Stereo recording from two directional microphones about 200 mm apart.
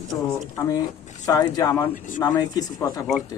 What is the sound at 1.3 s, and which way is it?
A man's voice, 20° left (ahead or behind).